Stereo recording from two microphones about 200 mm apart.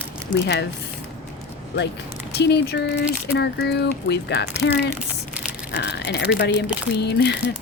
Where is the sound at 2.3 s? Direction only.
55° left (ahead or behind).